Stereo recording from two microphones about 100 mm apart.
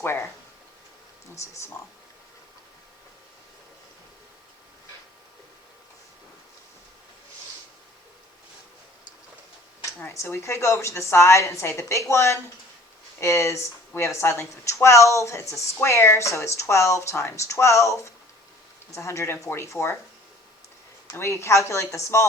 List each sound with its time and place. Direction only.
0.0 s speech: 25° left (ahead or behind)
1.4 s speech: 30° left (ahead or behind)
10.0 s speech: 25° left (ahead or behind)
21.1 s speech: 30° left (ahead or behind)